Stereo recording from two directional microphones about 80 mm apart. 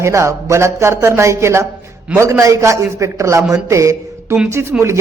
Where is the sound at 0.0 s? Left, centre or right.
Right.